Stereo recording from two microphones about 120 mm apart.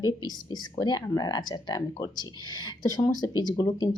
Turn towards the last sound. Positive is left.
turn(degrees=35)  # may be behind; listen again after turning